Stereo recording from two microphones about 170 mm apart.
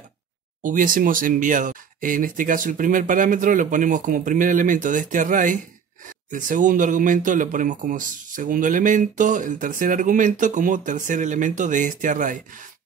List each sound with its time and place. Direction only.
0.6 s speech: 50° right (ahead or behind)